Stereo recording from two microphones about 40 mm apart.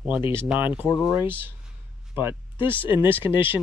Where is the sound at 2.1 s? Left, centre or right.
Right.